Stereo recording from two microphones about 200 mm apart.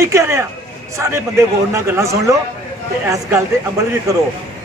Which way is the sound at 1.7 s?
15° right (ahead or behind).